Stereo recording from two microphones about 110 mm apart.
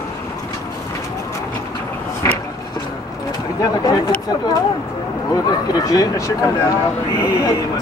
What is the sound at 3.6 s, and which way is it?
Speech, 35° left (ahead or behind).